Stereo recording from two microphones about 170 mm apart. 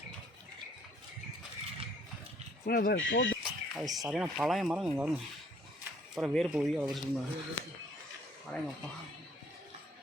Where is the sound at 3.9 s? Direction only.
Centre (ahead or behind).